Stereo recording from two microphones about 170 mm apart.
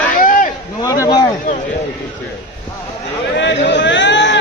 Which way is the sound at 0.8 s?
20° left (ahead or behind).